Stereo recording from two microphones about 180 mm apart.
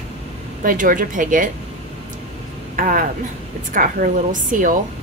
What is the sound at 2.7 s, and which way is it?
A woman's voice, 50° right (ahead or behind).